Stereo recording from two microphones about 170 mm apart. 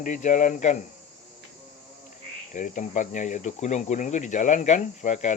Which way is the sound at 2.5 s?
45° left (ahead or behind).